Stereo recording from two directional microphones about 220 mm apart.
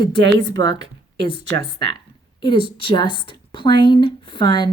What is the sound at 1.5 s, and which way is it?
Speech, 55° right (ahead or behind).